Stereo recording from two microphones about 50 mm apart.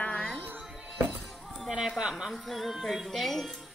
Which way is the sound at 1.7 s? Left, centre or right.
Centre.